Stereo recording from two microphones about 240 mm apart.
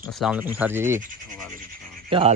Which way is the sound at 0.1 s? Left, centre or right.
Centre.